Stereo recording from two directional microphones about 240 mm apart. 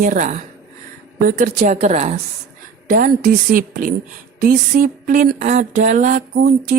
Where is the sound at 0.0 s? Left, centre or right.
Right.